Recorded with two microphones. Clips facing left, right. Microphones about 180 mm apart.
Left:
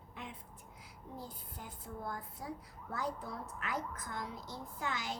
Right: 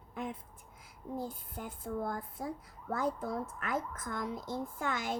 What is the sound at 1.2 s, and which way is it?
Speech, 55° right (ahead or behind).